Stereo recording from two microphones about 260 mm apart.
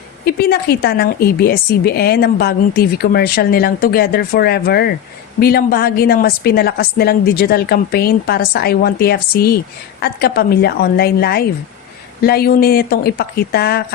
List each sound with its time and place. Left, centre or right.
0.3 s a woman's voice: left